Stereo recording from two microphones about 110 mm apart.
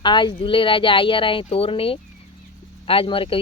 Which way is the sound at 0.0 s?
45° left (ahead or behind).